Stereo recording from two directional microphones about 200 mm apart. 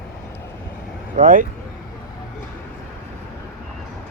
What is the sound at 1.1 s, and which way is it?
Speech, 40° right (ahead or behind).